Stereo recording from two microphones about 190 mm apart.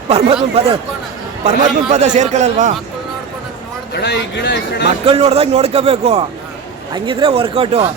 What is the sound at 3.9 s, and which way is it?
Speech, 60° left (ahead or behind).